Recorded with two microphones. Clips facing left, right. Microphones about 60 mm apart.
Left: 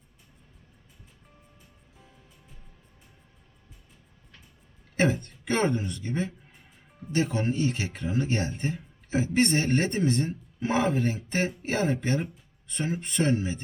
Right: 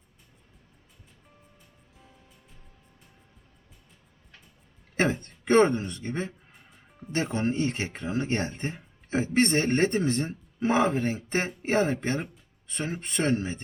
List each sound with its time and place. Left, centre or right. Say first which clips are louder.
5.2 s a man's voice: right 6 dB; right
6.5 s music: right 1 dB; centre
7.3 s a man's voice: even; right